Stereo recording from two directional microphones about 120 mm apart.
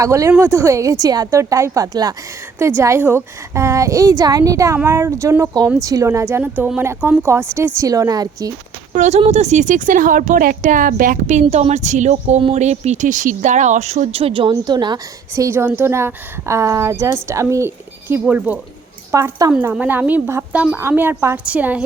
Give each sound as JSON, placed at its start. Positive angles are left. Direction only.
{"t": 0.0, "sound": "speech", "side_deg": -25}
{"t": 2.6, "sound": "speech", "side_deg": -20}
{"t": 8.9, "sound": "speech", "side_deg": -75}
{"t": 11.3, "sound": "speech", "side_deg": -75}
{"t": 14.5, "sound": "speech", "side_deg": -35}
{"t": 18.1, "sound": "speech", "side_deg": -15}
{"t": 19.1, "sound": "speech", "side_deg": -30}
{"t": 19.7, "sound": "speech", "side_deg": -15}